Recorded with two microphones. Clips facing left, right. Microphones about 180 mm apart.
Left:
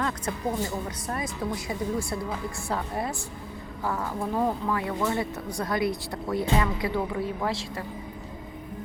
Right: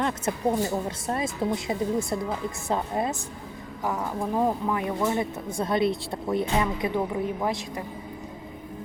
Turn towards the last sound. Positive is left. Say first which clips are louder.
# right 2 dB
turn(degrees=-20)  # may be behind; listen again after turning